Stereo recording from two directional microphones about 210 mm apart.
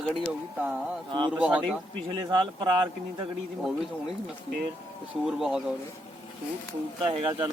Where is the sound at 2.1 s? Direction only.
20° right (ahead or behind).